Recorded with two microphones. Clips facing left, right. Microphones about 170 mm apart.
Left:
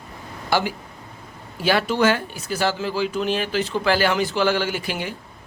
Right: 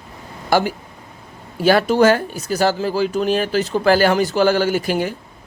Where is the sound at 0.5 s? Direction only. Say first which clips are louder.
Right 5 dB; 45° right (ahead or behind).